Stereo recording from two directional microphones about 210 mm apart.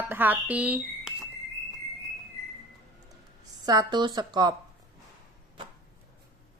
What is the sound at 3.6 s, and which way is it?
Speech, 20° right (ahead or behind).